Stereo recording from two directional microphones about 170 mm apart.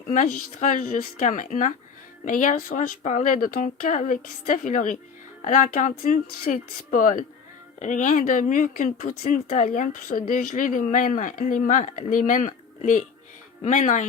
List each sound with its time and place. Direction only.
0.1 s speech: 50° left (ahead or behind)